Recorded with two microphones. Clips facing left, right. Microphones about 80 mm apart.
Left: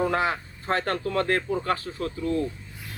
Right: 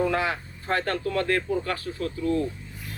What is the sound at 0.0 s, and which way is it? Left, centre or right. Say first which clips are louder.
Speech: left 1 dB; left.